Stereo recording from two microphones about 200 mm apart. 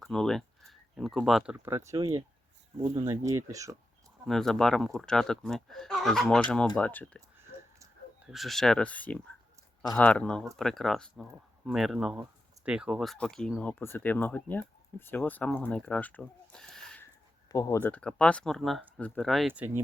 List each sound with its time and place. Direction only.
0.0 s speech: centre (ahead or behind)
1.5 s speech: 10° right (ahead or behind)
4.3 s speech: centre (ahead or behind)
7.3 s a sound: 10° right (ahead or behind)
8.3 s speech: centre (ahead or behind)
17.5 s speech: 15° left (ahead or behind); by 19.8 s 10° right (ahead or behind)